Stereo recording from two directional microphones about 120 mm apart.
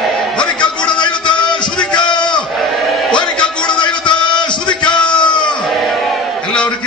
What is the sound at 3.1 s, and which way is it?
Music, 10° left (ahead or behind).